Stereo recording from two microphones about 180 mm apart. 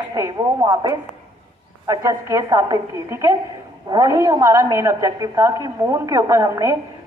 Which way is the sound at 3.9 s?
20° right (ahead or behind).